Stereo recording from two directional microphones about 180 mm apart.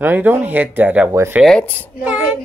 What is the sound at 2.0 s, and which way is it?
Child singing, 10° right (ahead or behind).